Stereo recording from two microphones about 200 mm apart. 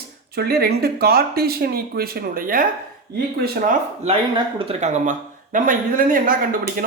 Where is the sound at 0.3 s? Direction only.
50° right (ahead or behind).